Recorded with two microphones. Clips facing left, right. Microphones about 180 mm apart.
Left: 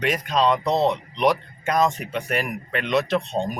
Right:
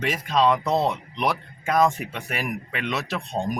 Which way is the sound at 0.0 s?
Centre (ahead or behind).